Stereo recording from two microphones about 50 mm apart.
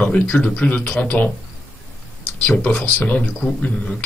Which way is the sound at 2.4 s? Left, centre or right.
Left.